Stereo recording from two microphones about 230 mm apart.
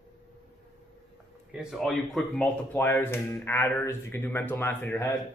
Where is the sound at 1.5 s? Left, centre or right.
Centre.